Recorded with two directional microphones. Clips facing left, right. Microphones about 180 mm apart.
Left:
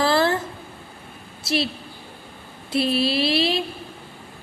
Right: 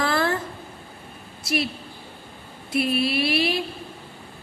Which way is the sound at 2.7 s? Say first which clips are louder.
Left 2 dB; 30° left (ahead or behind).